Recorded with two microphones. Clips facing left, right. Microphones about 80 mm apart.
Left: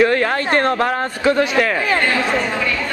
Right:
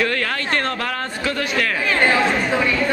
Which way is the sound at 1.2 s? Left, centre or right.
Left.